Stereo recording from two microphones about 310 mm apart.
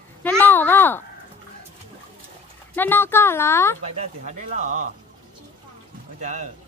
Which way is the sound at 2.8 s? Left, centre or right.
Centre.